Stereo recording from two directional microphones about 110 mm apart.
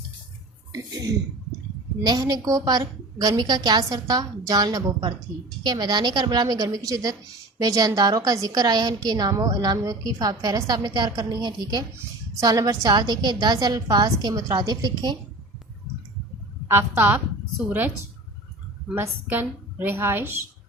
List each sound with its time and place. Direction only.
0.7 s speech: 35° right (ahead or behind)
2.0 s a woman's voice: 35° right (ahead or behind)
16.6 s a woman's voice: 25° right (ahead or behind)
18.9 s a woman's voice: 20° right (ahead or behind)